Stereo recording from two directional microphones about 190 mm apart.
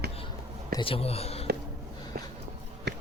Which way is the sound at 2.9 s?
65° right (ahead or behind).